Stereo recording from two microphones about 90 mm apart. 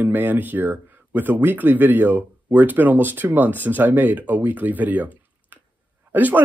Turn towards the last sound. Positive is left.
turn(degrees=-20)  # may be behind; listen again after turning